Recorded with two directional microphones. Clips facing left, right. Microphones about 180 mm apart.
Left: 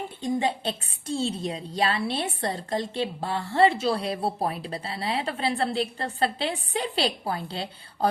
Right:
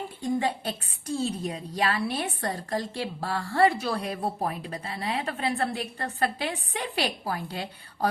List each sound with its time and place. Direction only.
0.2 s a woman's voice: 20° left (ahead or behind)